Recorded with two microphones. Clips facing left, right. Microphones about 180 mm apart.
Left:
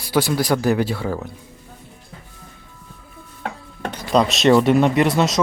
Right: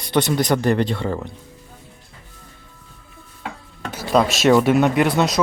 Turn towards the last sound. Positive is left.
turn(degrees=0)  # may be behind; listen again after turning